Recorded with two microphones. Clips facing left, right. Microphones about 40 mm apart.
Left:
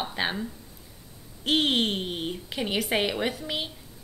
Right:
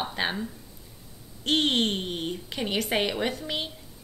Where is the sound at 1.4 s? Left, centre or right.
Centre.